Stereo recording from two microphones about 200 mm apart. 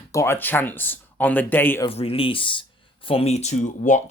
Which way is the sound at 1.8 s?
30° left (ahead or behind).